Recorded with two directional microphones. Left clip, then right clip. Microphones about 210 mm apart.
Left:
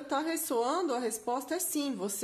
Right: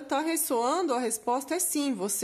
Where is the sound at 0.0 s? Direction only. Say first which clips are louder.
Right 4 dB; 30° right (ahead or behind).